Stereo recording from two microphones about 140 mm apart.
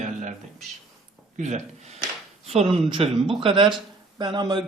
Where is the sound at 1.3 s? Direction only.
55° right (ahead or behind); by 4.6 s 30° right (ahead or behind).